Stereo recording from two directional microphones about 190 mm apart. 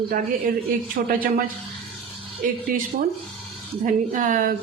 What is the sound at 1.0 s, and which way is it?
Speech, 50° right (ahead or behind).